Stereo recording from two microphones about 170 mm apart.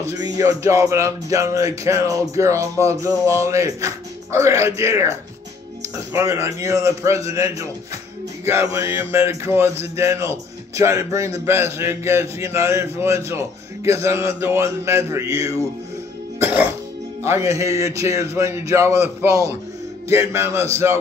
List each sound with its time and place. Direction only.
0.2 s speech: 20° right (ahead or behind)
6.1 s speech: 15° right (ahead or behind)
16.3 s music: 10° right (ahead or behind)
17.2 s a man's voice: 15° right (ahead or behind)